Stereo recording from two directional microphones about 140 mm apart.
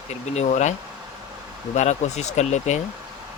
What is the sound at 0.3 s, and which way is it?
Speech, 55° left (ahead or behind).